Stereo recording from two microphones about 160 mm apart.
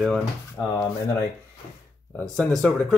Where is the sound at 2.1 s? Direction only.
5° left (ahead or behind).